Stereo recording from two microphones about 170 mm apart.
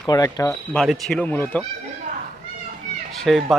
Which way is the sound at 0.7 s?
Centre (ahead or behind).